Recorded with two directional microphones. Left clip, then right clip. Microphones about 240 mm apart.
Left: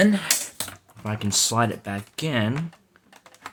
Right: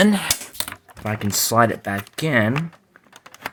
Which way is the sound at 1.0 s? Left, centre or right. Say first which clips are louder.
Right 1 dB; centre.